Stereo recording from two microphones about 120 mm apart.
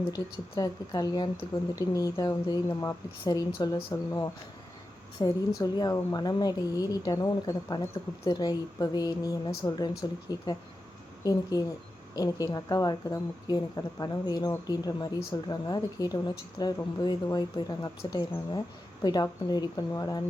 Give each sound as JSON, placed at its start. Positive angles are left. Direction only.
{"t": 0.1, "sound": "a woman's voice", "side_deg": 30}